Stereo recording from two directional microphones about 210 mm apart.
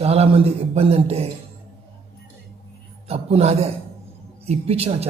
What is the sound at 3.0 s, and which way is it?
A man's voice, 30° right (ahead or behind).